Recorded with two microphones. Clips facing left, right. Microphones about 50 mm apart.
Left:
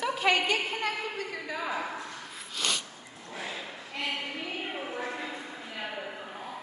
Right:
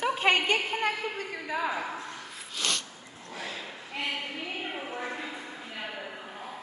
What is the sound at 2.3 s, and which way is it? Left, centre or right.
Snort, centre.